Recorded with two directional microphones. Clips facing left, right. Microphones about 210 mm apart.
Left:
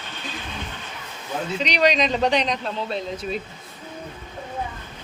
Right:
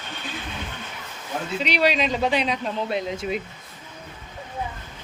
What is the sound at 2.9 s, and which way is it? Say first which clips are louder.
Speech: right 1 dB; 15° right (ahead or behind).